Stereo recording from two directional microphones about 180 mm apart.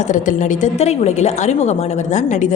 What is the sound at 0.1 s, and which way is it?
A woman's voice, 45° left (ahead or behind).